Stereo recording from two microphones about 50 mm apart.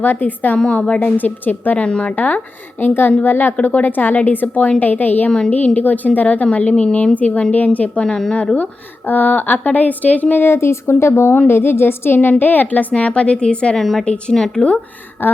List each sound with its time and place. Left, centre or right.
0.0 s a woman's voice: left
1.9 s a woman's voice: centre
2.1 s a woman's voice: left
8.0 s speech: centre
8.5 s a woman's voice: left
10.4 s a woman's voice: left
13.7 s a woman's voice: centre
14.0 s a woman's voice: left
14.3 s speech: centre
15.2 s a woman's voice: left